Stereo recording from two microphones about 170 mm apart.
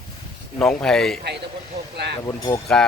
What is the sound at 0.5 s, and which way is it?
Speech, 5° left (ahead or behind).